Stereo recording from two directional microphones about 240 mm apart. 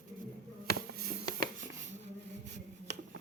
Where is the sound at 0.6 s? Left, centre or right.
Right.